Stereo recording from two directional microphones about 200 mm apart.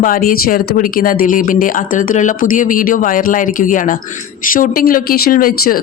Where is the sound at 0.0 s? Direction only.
45° left (ahead or behind).